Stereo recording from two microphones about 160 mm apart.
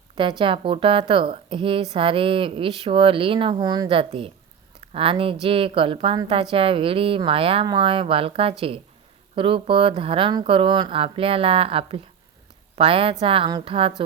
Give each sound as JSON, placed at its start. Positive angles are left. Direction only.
{"t": 0.2, "sound": "speech", "side_deg": -30}